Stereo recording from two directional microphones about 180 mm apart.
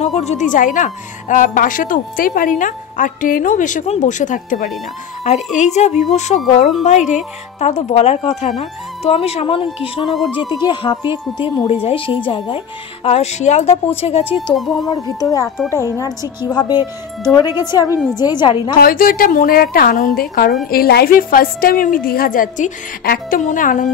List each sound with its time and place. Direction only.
0.2 s a woman's voice: 40° left (ahead or behind)
14.5 s speech: centre (ahead or behind)
15.0 s speech: 20° left (ahead or behind)
17.5 s speech: 10° right (ahead or behind)
17.7 s speech: 20° left (ahead or behind)
18.8 s a woman's voice: 55° left (ahead or behind)